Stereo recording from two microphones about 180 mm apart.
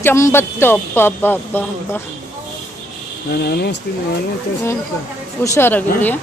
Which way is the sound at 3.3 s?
65° left (ahead or behind).